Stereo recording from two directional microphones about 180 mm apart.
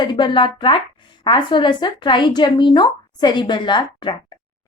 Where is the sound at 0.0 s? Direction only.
25° left (ahead or behind).